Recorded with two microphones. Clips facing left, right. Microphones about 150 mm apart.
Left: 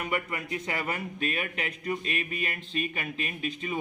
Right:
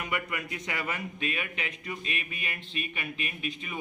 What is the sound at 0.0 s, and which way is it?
A man's voice, 35° left (ahead or behind).